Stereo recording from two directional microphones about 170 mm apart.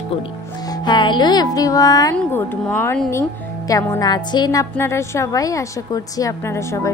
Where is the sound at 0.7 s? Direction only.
25° left (ahead or behind).